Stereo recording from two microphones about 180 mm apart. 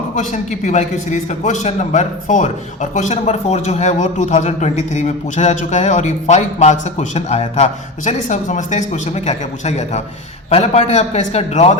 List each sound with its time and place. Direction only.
0.2 s a man's voice: 40° left (ahead or behind)